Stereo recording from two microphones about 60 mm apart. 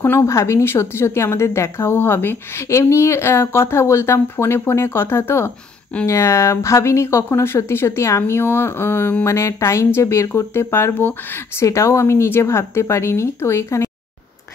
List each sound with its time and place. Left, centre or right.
0.2 s speech: left
9.2 s speech: left
11.6 s speech: left